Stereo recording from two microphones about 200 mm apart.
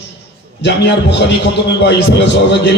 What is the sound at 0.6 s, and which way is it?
A man's voice, 60° left (ahead or behind).